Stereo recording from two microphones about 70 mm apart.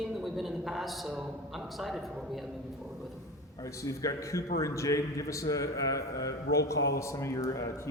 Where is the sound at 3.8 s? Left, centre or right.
Left.